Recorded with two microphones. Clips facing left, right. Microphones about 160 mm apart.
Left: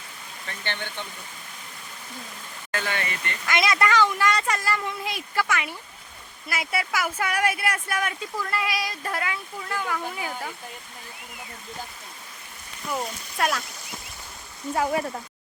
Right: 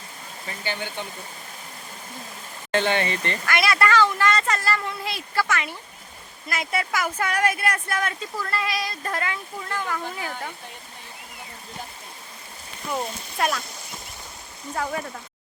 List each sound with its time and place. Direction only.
0.4 s speech: 5° right (ahead or behind)
2.7 s speech: 30° right (ahead or behind)
3.4 s speech: 20° left (ahead or behind)
12.9 s speech: centre (ahead or behind)